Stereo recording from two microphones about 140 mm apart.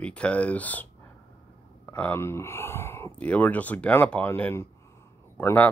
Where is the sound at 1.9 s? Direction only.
15° left (ahead or behind).